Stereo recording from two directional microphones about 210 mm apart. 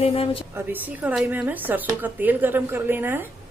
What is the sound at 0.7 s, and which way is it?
Speech, 5° right (ahead or behind).